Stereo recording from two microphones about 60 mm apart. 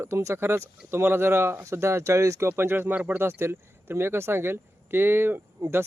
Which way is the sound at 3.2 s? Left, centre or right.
Right.